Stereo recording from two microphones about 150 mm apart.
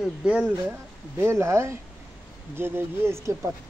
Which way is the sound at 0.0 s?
5° right (ahead or behind).